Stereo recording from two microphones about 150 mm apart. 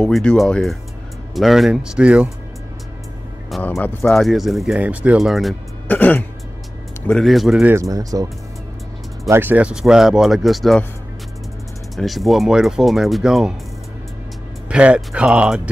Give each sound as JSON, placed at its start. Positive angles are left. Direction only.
{"t": 0.0, "sound": "speech", "side_deg": 5}
{"t": 3.8, "sound": "speech", "side_deg": 0}
{"t": 5.9, "sound": "speech", "side_deg": 10}
{"t": 7.7, "sound": "speech", "side_deg": -20}
{"t": 9.3, "sound": "speech", "side_deg": -15}
{"t": 11.9, "sound": "speech", "side_deg": 0}
{"t": 14.7, "sound": "speech", "side_deg": -5}